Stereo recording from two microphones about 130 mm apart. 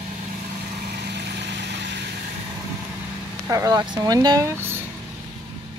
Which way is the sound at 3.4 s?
25° right (ahead or behind).